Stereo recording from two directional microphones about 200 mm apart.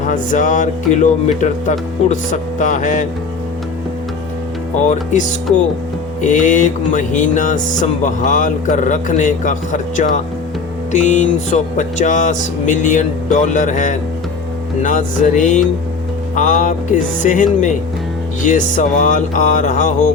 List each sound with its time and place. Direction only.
0.0 s music: 40° left (ahead or behind)
4.8 s music: 35° left (ahead or behind)
6.2 s music: 40° left (ahead or behind)